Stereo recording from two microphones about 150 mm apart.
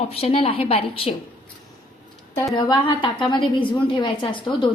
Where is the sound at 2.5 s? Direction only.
30° left (ahead or behind).